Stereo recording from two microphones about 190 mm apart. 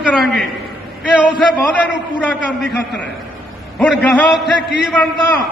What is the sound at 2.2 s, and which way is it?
Speech, 5° left (ahead or behind).